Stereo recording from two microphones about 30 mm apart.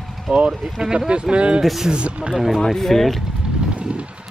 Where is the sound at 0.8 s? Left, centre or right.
Right.